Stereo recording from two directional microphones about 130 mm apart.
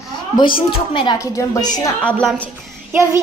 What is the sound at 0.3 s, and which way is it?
Speech, 40° left (ahead or behind).